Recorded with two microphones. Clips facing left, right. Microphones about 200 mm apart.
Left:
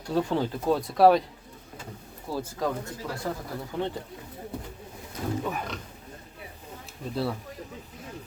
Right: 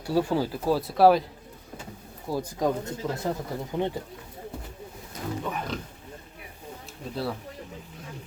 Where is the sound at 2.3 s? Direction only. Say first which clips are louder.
Right 3 dB; 15° right (ahead or behind).